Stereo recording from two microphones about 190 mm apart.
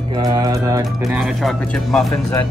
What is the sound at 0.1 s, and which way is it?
Music, 20° right (ahead or behind).